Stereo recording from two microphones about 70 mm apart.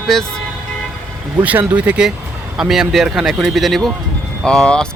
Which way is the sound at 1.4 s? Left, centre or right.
Centre.